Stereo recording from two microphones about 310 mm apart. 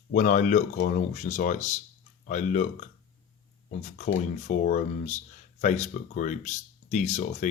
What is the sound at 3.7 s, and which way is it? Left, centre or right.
Speech, left.